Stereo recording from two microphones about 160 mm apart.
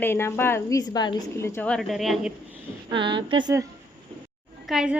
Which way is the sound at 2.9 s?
30° right (ahead or behind).